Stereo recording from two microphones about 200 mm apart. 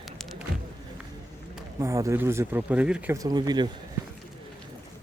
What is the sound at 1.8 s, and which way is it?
Speech, 15° right (ahead or behind).